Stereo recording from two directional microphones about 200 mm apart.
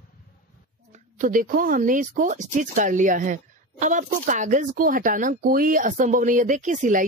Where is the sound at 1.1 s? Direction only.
40° right (ahead or behind).